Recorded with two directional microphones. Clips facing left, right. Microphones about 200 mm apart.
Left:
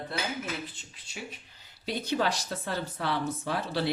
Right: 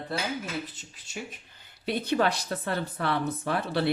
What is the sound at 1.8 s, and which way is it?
Speech, 60° right (ahead or behind).